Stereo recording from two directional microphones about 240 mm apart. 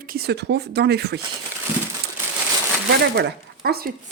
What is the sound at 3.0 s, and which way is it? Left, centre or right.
Speech, right.